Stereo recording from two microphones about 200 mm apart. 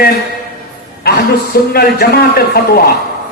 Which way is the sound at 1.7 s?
50° left (ahead or behind).